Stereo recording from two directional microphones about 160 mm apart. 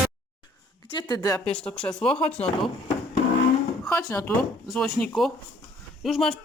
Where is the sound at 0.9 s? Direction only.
25° left (ahead or behind).